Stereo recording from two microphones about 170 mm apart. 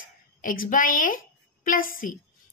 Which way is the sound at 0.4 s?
55° left (ahead or behind).